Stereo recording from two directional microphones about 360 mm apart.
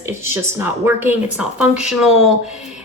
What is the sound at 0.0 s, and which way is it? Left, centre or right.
Speech, centre.